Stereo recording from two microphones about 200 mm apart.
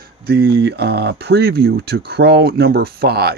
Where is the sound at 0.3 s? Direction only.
55° right (ahead or behind).